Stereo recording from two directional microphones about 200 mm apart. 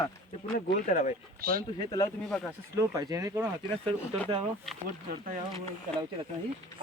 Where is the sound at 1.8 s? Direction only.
20° left (ahead or behind).